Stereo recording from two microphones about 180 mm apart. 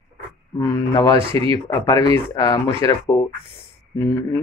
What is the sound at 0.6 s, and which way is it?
Speech, 20° left (ahead or behind).